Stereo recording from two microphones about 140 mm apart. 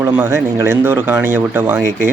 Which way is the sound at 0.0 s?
15° right (ahead or behind).